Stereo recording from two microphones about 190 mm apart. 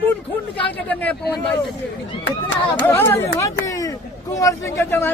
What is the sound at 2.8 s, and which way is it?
Speech, 10° left (ahead or behind).